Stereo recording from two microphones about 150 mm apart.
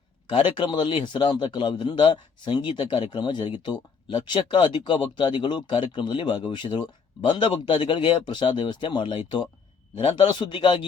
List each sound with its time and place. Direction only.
0.3 s a man's voice: 35° left (ahead or behind)